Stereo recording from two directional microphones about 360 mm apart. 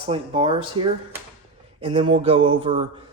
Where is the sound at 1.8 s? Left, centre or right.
Centre.